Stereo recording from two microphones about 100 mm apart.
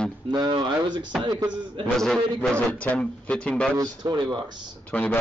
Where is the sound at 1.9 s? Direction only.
5° left (ahead or behind).